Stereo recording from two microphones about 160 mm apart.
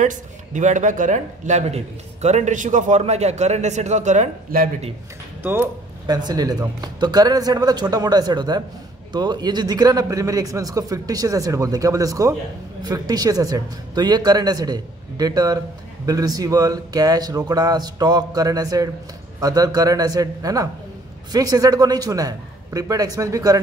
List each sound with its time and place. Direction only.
0.0 s a man's voice: 50° right (ahead or behind)
5.4 s speech: 10° right (ahead or behind)
6.0 s speech: 25° right (ahead or behind)